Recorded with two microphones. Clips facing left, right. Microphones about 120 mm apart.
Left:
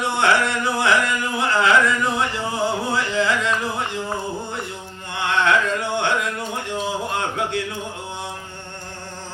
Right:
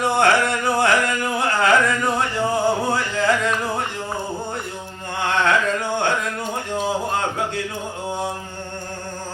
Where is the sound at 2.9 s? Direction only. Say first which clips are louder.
Right 1 dB; 45° right (ahead or behind).